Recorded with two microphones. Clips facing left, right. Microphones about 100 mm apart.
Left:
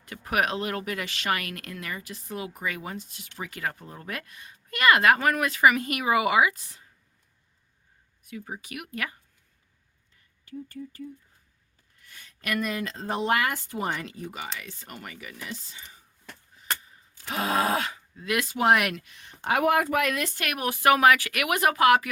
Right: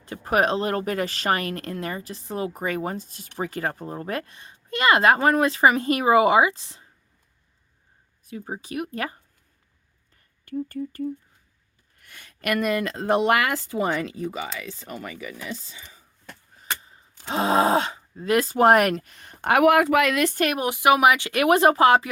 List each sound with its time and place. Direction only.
0.0 s speech: 30° right (ahead or behind)
8.2 s speech: 35° right (ahead or behind)
10.4 s speech: 50° right (ahead or behind)
11.9 s speech: 65° right (ahead or behind); by 13.7 s 90° right
16.8 s speech: 30° right (ahead or behind); by 20.3 s 90° right
20.3 s speech: 30° right (ahead or behind)
20.7 s speech: 15° right (ahead or behind)
21.4 s speech: 35° right (ahead or behind)